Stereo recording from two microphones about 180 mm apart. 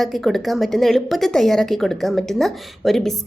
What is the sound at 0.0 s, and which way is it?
A woman's voice, centre (ahead or behind).